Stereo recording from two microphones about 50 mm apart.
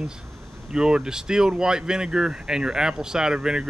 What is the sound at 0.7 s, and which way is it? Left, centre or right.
Speech, centre.